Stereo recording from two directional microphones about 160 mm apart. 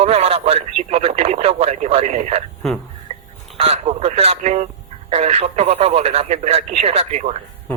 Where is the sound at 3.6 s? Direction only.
40° right (ahead or behind).